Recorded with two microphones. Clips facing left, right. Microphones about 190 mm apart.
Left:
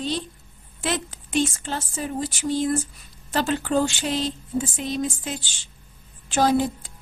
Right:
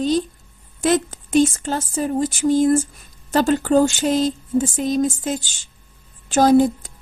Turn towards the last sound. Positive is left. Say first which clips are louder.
# right 7 dB
turn(degrees=-45)  # may be behind; listen again after turning